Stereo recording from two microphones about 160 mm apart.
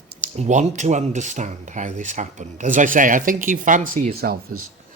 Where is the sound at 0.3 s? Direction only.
45° right (ahead or behind).